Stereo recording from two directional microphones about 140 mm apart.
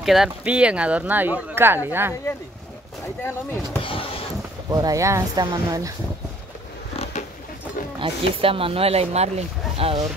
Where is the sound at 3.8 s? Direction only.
40° left (ahead or behind).